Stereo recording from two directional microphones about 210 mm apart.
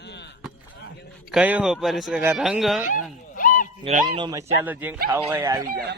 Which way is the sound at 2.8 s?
40° left (ahead or behind).